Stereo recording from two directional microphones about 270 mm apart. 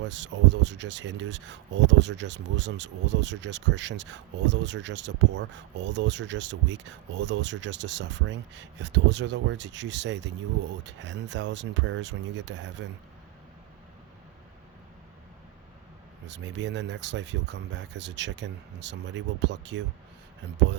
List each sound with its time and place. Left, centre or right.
0.0 s speech: right
16.2 s speech: right